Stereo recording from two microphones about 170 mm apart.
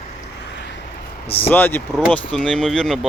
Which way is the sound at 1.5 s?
10° left (ahead or behind).